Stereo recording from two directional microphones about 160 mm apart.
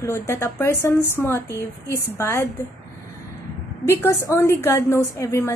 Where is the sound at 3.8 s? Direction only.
15° left (ahead or behind).